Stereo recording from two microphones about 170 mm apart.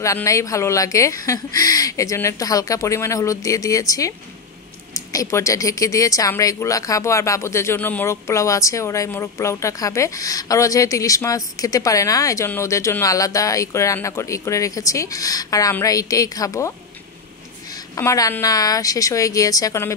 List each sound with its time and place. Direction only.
0.0 s speech: 20° left (ahead or behind)